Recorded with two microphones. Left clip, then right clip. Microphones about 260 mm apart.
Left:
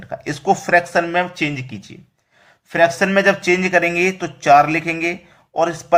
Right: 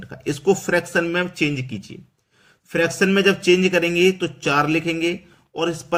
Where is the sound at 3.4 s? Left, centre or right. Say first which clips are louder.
Left 2 dB; centre.